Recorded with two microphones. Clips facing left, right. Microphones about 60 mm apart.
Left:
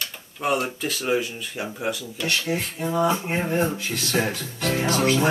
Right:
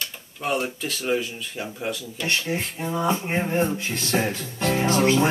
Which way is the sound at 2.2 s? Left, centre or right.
Right.